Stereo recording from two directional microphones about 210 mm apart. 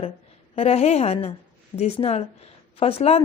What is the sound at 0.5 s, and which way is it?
A woman's voice, 30° left (ahead or behind).